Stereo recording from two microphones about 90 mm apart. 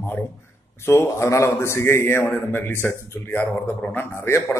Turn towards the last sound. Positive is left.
turn(degrees=20)  # may be behind; listen again after turning